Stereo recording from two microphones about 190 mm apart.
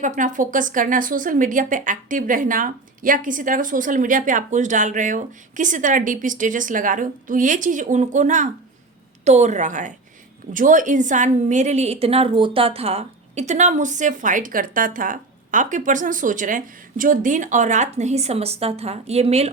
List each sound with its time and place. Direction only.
0.0 s a woman's voice: 40° right (ahead or behind)